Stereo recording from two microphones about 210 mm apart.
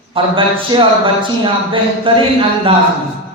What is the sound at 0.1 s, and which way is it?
A man's voice, 25° right (ahead or behind).